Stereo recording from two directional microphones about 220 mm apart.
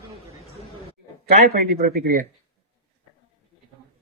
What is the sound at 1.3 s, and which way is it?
Speech, 45° right (ahead or behind).